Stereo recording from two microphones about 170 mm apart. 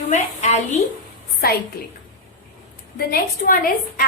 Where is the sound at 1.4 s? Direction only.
65° left (ahead or behind).